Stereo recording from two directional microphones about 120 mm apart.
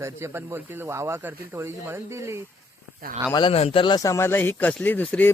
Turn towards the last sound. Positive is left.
turn(degrees=15)  # may be behind; listen again after turning